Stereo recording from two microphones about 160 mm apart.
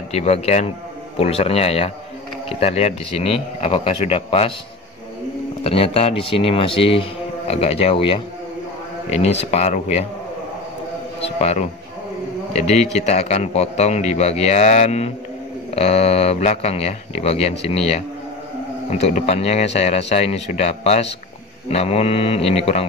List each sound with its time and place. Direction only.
0.1 s a man's voice: 40° left (ahead or behind)
5.6 s speech: 40° left (ahead or behind)
11.2 s a man's voice: 40° left (ahead or behind)